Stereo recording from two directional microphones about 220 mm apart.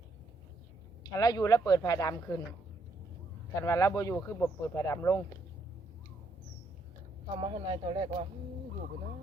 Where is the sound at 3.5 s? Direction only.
15° left (ahead or behind).